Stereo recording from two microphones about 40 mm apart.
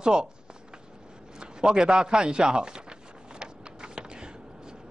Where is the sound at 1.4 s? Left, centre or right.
Centre.